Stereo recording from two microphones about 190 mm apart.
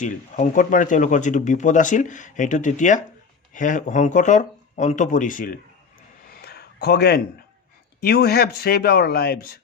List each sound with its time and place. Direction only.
0.0 s speech: 45° left (ahead or behind)
6.2 s a sound: 60° left (ahead or behind)
8.0 s speech: 55° left (ahead or behind)